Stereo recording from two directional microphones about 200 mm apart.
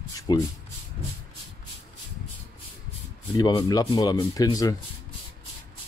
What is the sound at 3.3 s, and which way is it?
Speech, 20° left (ahead or behind).